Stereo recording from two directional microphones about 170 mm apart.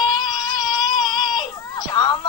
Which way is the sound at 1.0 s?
25° left (ahead or behind).